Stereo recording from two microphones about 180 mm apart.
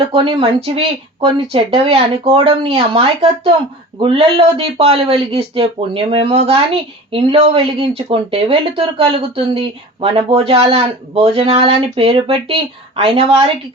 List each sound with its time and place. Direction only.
0.0 s speech: 30° right (ahead or behind)